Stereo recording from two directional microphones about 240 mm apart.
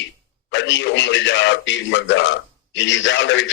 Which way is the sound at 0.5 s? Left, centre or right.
Left.